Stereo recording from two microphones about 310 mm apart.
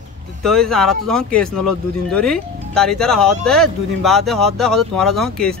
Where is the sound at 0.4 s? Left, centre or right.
Centre.